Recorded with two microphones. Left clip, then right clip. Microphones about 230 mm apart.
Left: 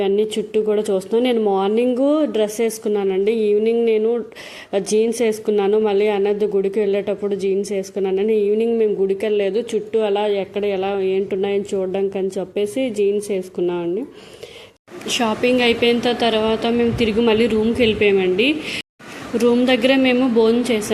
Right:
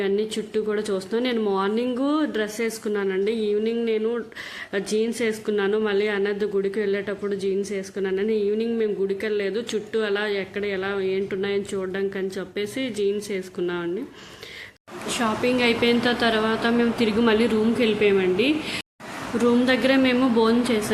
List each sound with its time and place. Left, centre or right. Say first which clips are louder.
0.2 s a woman's voice: left 7 dB; centre
10.2 s speech: left 6 dB; right
10.8 s a woman's voice: left 5 dB; centre
15.0 s a woman's voice: left 5 dB; centre